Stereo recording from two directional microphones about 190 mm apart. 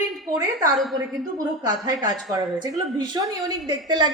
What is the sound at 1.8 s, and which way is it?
A woman's voice, 20° right (ahead or behind).